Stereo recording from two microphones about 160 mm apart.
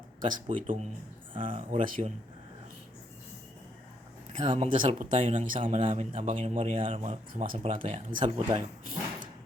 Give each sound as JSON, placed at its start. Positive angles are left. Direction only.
{"t": 0.5, "sound": "speech", "side_deg": -55}
{"t": 1.3, "sound": "a man's voice", "side_deg": -35}
{"t": 1.7, "sound": "speech", "side_deg": -45}
{"t": 4.3, "sound": "a man's voice", "side_deg": -30}
{"t": 4.9, "sound": "speech", "side_deg": -50}
{"t": 5.5, "sound": "a man's voice", "side_deg": -35}